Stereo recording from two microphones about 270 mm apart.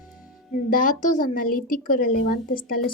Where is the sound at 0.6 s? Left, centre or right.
Left.